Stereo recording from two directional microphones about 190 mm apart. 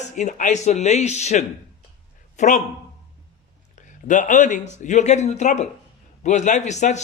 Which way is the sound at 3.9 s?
40° left (ahead or behind).